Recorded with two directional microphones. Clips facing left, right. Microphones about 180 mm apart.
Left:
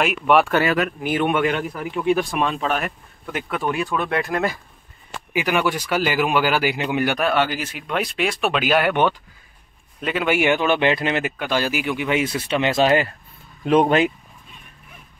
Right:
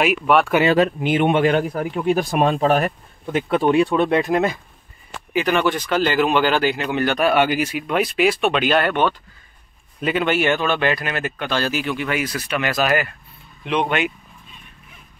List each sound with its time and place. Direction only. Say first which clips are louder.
0.0 s speech: even; centre (ahead or behind)
0.7 s speech: right 5 dB; 25° right (ahead or behind)
1.5 s speech: right 5 dB; 40° right (ahead or behind)
3.3 s speech: right 7 dB; 25° right (ahead or behind)
5.3 s speech: right 2 dB; 10° left (ahead or behind)
7.3 s speech: right 4 dB; 15° right (ahead or behind); by 9.1 s 15° left (ahead or behind)
9.9 s a man's voice: right 3 dB; centre (ahead or behind)
10.2 s speech: left 2 dB; 15° left (ahead or behind)
11.3 s speech: even; 10° left (ahead or behind); by 13.1 s 25° left (ahead or behind)
13.7 s speech: left 5 dB; 40° left (ahead or behind)